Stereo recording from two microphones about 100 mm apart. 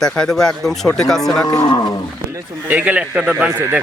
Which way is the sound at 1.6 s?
50° left (ahead or behind).